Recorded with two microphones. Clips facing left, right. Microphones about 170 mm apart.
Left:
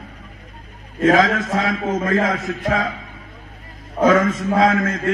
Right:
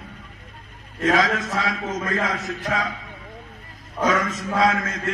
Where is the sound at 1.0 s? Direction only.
30° left (ahead or behind).